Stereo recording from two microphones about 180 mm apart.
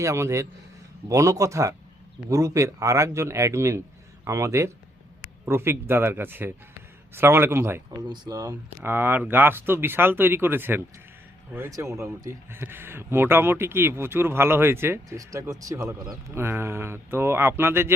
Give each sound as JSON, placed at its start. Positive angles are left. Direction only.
{"t": 0.0, "sound": "speech", "side_deg": -15}
{"t": 8.0, "sound": "speech", "side_deg": -25}